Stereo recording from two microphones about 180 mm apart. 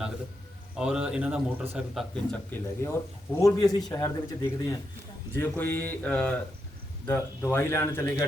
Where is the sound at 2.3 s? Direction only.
10° left (ahead or behind).